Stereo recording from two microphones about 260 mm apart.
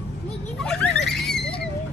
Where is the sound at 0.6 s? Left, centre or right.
Centre.